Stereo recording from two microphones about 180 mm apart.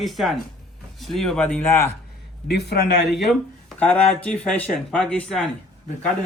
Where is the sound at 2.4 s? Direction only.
65° left (ahead or behind).